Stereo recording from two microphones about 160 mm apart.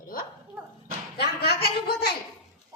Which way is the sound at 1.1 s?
90° left.